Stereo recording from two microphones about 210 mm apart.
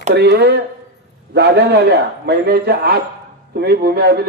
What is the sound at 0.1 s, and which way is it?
A man's voice, 50° right (ahead or behind).